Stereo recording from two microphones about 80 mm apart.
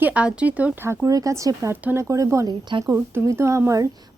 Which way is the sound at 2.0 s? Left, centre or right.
Right.